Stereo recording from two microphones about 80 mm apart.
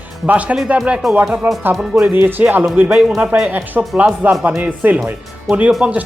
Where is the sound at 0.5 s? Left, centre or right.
Centre.